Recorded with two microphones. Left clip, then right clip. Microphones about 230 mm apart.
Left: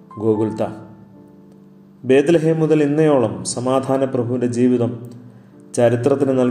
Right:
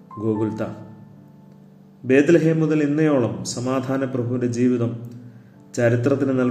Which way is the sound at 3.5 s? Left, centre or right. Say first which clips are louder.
Left 7 dB; centre.